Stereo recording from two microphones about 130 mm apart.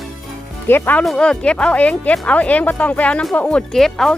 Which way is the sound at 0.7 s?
15° left (ahead or behind).